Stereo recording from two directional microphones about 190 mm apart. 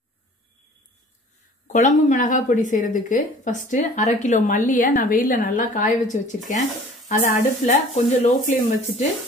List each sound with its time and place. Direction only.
1.7 s speech: 40° left (ahead or behind)